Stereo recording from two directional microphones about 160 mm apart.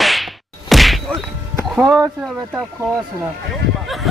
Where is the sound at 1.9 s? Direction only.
Centre (ahead or behind).